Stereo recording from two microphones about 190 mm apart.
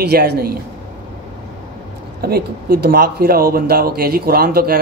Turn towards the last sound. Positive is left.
turn(degrees=-55)  # may be behind; listen again after turning